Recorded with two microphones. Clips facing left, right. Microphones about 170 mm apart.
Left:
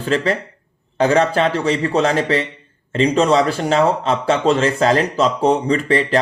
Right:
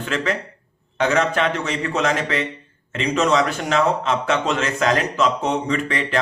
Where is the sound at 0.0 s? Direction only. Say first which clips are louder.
Left 5 dB; 35° left (ahead or behind).